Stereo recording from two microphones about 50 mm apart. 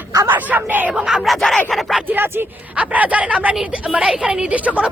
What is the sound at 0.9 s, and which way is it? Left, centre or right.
Speech, centre.